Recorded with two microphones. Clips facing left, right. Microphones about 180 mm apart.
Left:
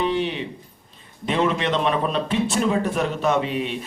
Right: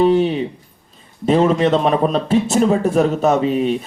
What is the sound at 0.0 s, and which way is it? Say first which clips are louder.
Speech: right 9 dB; 40° right (ahead or behind).